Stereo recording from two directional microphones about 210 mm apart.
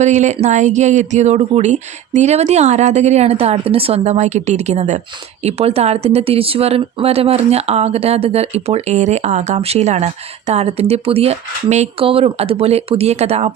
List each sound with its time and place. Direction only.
0.0 s speech: 35° right (ahead or behind)